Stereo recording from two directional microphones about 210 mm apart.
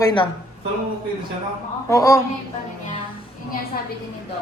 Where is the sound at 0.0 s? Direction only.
20° left (ahead or behind).